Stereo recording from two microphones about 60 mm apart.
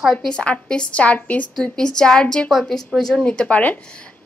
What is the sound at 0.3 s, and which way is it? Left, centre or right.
A woman's voice, centre.